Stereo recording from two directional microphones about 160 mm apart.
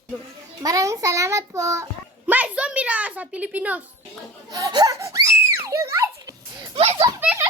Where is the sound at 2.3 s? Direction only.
10° right (ahead or behind).